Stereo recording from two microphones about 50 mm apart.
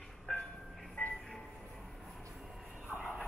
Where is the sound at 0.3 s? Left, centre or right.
Centre.